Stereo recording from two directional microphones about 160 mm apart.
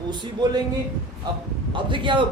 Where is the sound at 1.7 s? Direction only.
30° right (ahead or behind).